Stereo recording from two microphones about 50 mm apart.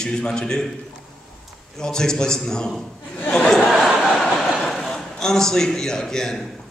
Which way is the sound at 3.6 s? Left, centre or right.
Centre.